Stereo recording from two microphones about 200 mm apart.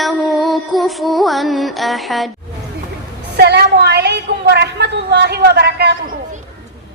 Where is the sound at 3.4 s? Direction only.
55° right (ahead or behind).